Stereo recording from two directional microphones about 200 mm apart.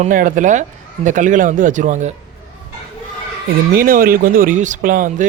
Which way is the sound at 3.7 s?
45° right (ahead or behind).